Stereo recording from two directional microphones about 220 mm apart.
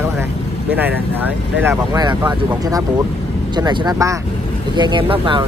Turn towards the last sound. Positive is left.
turn(degrees=-20)  # may be behind; listen again after turning